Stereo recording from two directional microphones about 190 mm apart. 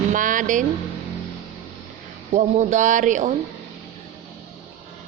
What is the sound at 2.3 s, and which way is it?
Speech, 40° right (ahead or behind).